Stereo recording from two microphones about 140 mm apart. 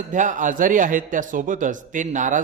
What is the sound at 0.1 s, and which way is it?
A man's voice, 65° right (ahead or behind).